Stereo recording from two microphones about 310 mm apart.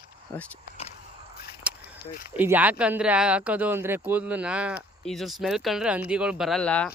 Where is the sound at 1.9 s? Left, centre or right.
Left.